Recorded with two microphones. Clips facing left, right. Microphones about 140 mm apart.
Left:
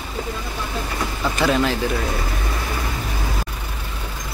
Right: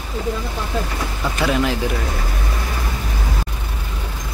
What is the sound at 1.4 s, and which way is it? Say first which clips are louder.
Speech: even; 5° right (ahead or behind).